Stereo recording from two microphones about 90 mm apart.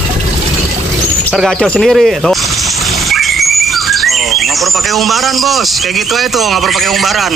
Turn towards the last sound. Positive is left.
turn(degrees=0)  # may be behind; listen again after turning